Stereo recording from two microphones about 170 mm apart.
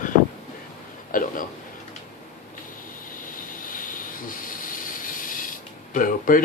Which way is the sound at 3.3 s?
55° left (ahead or behind).